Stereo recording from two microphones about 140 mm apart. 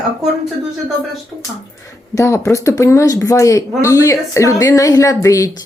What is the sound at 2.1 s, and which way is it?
Speech, 20° left (ahead or behind).